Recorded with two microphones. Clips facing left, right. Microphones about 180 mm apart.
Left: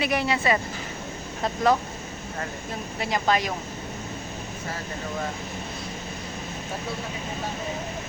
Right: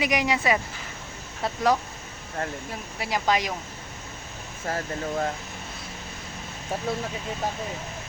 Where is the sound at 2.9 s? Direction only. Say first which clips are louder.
Left 1 dB; 10° right (ahead or behind).